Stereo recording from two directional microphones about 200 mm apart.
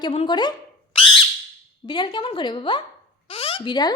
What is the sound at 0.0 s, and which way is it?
Speech, 25° left (ahead or behind).